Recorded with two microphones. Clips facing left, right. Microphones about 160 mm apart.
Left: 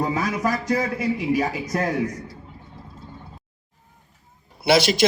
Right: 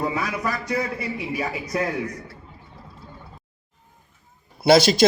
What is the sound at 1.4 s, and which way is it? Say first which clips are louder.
Speech: left 2 dB; 45° left (ahead or behind).